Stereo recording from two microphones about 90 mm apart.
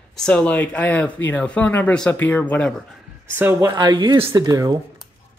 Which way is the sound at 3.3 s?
25° right (ahead or behind).